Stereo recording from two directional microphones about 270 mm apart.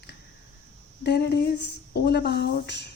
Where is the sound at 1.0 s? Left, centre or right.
Left.